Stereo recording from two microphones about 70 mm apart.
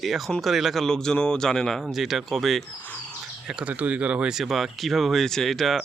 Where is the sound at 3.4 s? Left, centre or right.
Centre.